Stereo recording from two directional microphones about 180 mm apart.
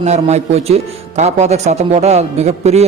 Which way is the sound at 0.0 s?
40° right (ahead or behind).